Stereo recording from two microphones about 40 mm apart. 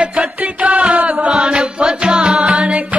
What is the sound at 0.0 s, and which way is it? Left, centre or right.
Music, right.